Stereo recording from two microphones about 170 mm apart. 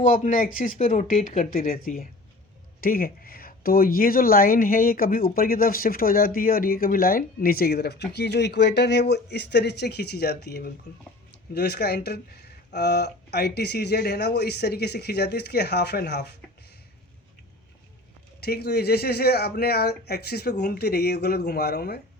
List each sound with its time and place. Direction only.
0.0 s speech: 50° left (ahead or behind); by 16.2 s 75° left (ahead or behind)
18.3 s speech: 70° left (ahead or behind)